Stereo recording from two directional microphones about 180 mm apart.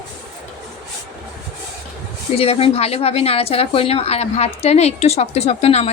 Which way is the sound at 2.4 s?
35° left (ahead or behind).